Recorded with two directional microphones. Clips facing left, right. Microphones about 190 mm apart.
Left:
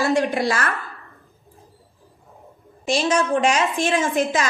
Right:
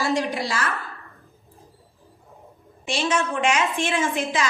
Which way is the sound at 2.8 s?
40° left (ahead or behind).